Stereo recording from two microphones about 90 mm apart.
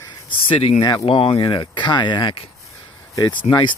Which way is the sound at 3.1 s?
50° left (ahead or behind).